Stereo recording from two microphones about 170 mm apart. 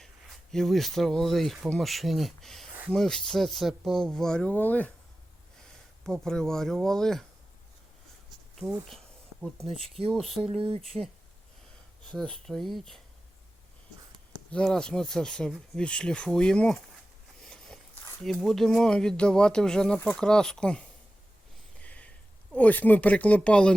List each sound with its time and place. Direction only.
0.5 s speech: centre (ahead or behind)
6.0 s speech: 5° left (ahead or behind)
8.9 s insect: centre (ahead or behind)
10.0 s speech: 35° right (ahead or behind)
12.0 s speech: 5° left (ahead or behind)
14.5 s speech: 5° left (ahead or behind)
17.4 s a sound: 5° left (ahead or behind)
18.2 s speech: centre (ahead or behind)
21.8 s a sound: 10° left (ahead or behind)
22.5 s speech: 10° left (ahead or behind)